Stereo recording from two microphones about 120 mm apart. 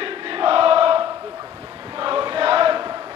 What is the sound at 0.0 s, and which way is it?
Choir, 50° right (ahead or behind).